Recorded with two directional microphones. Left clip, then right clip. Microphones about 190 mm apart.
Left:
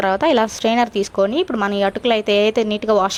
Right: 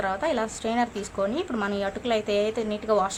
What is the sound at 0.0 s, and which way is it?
Speech, 40° left (ahead or behind).